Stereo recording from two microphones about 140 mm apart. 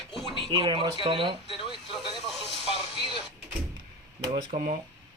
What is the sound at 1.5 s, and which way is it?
Speech, 40° left (ahead or behind).